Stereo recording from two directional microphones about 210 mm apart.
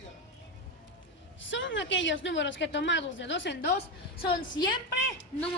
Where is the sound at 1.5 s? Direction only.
60° left (ahead or behind).